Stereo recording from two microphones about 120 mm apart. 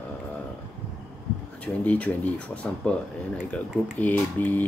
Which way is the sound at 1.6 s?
10° left (ahead or behind).